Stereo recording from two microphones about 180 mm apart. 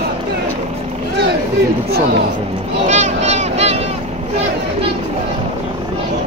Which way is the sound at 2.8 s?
40° right (ahead or behind).